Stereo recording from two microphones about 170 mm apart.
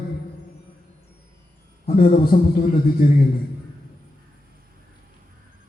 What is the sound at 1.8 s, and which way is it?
Mantra, 60° left (ahead or behind).